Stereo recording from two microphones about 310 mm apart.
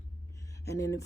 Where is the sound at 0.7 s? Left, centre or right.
Centre.